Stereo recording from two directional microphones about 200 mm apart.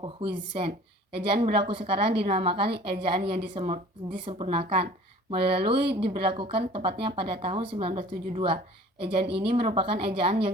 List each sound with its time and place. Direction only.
0.0 s a woman's voice: 25° right (ahead or behind)